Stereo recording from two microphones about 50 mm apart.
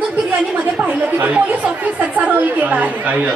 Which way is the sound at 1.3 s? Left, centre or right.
Right.